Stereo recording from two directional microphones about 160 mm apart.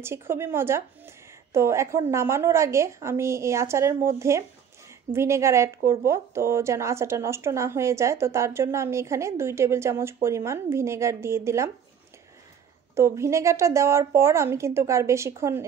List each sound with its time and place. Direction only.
0.0 s a woman's voice: 15° right (ahead or behind)
12.9 s a woman's voice: 20° right (ahead or behind)